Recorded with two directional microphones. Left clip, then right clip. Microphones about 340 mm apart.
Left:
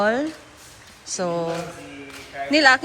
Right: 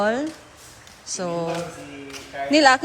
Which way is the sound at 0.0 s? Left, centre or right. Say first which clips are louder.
Left 1 dB; centre.